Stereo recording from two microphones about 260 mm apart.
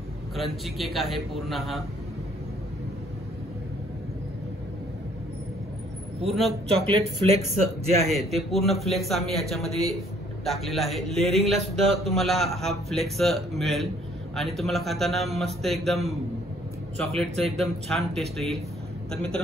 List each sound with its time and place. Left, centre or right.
0.4 s a man's voice: centre
6.2 s a man's voice: centre
7.2 s speech: right
8.4 s a man's voice: centre